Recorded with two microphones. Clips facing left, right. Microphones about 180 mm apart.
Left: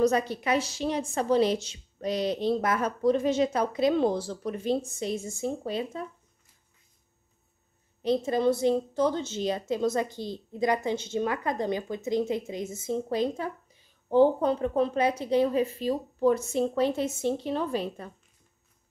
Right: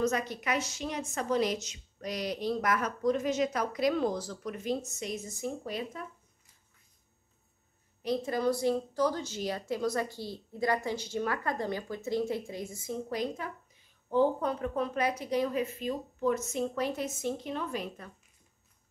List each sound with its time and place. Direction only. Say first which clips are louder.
0.0 s a woman's voice: left 6 dB; 30° left (ahead or behind)
8.0 s a woman's voice: left 5 dB; 25° left (ahead or behind)